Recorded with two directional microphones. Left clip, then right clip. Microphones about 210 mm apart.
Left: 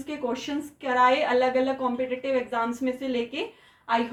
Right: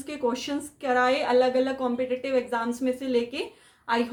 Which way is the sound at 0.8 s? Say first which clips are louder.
Left 2 dB; 20° right (ahead or behind).